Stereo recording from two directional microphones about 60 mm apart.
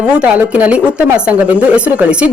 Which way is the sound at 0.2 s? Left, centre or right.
Right.